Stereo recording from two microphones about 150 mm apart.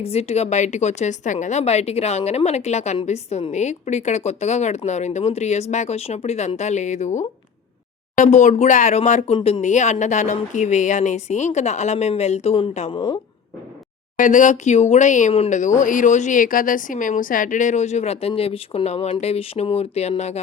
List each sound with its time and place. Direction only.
0.0 s a woman's voice: 45° left (ahead or behind)
12.9 s a woman's voice: 30° left (ahead or behind)
14.2 s a woman's voice: 60° left (ahead or behind)